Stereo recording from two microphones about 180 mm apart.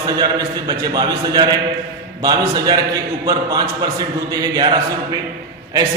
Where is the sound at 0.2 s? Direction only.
20° right (ahead or behind).